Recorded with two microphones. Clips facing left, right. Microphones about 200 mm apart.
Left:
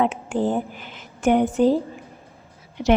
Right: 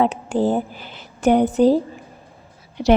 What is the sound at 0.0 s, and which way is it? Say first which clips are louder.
A woman's voice: right 3 dB; 35° right (ahead or behind).